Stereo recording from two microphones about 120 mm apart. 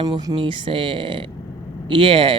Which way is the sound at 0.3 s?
45° right (ahead or behind).